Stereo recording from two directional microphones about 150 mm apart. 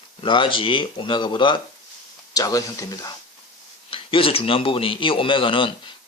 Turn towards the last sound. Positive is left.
turn(degrees=35)  # may be behind; listen again after turning